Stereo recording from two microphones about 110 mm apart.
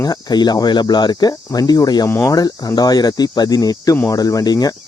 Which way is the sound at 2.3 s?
35° left (ahead or behind).